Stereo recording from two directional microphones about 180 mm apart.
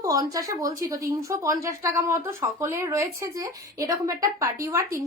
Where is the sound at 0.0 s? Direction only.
20° right (ahead or behind).